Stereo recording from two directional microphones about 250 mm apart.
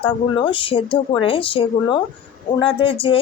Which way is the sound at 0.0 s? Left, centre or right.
Centre.